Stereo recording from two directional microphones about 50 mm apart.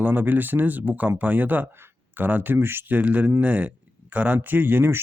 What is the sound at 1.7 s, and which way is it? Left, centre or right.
Speech, right.